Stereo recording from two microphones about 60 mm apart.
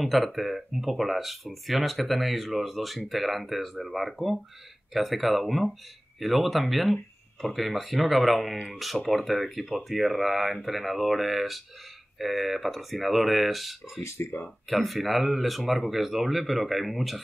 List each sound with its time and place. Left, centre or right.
0.0 s speech: centre
14.0 s speech: left
14.7 s speech: centre